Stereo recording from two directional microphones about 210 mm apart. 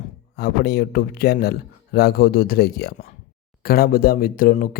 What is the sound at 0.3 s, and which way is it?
Speech, 50° left (ahead or behind).